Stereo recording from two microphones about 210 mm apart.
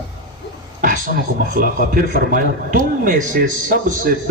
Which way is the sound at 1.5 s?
45° right (ahead or behind).